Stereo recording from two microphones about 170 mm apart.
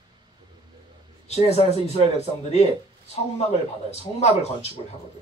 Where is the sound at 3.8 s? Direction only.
40° left (ahead or behind).